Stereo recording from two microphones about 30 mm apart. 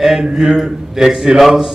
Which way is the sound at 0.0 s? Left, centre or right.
Centre.